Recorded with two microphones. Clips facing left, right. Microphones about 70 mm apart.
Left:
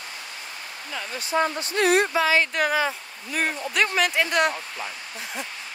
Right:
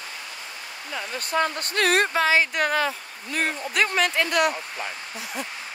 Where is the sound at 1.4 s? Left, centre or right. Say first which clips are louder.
Left 1 dB; right.